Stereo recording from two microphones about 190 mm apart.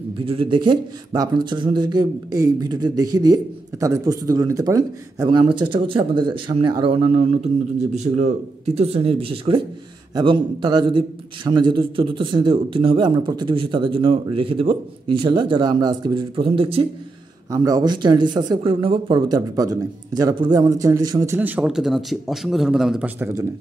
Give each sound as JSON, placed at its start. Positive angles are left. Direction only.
{"t": 0.2, "sound": "a man's voice", "side_deg": -30}